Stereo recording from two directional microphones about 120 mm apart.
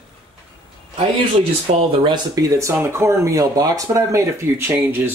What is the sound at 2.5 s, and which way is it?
Speech, 20° right (ahead or behind).